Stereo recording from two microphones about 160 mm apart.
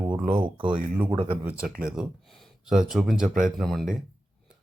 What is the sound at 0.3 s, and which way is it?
Speech, 30° right (ahead or behind).